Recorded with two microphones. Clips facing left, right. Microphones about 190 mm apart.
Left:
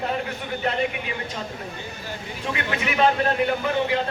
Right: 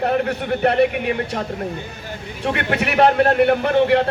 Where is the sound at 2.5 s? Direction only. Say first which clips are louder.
Right 6 dB; 65° right (ahead or behind).